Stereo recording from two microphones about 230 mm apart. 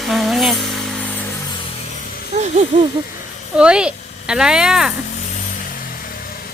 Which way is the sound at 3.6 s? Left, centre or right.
Centre.